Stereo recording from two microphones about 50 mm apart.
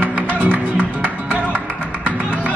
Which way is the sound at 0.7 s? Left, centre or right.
Right.